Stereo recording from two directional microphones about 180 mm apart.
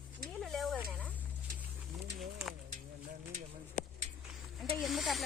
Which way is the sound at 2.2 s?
Centre (ahead or behind).